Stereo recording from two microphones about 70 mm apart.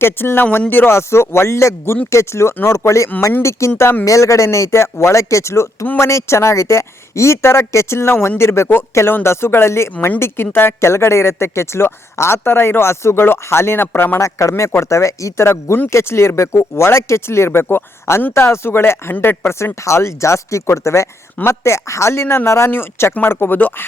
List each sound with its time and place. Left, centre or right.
0.0 s speech: left
14.2 s speech: left
23.6 s speech: left